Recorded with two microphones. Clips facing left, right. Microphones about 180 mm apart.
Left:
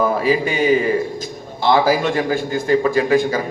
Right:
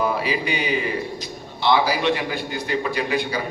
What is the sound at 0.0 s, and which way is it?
A man's voice, 45° left (ahead or behind).